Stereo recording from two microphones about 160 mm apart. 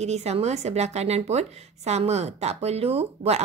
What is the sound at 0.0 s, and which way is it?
Speech, 45° right (ahead or behind).